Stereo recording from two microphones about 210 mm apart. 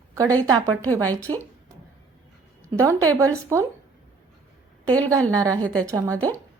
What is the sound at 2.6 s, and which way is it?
A woman's voice, 15° right (ahead or behind).